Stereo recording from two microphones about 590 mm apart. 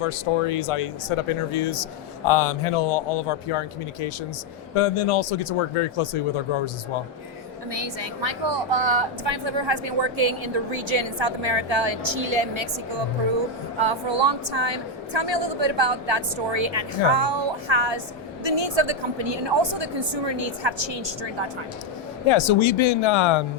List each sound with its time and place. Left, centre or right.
0.0 s speech: left
4.7 s speech: left
7.7 s a woman's voice: right
22.3 s speech: left